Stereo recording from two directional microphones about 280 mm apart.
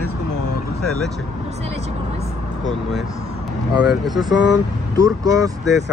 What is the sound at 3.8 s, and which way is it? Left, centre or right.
Speech, centre.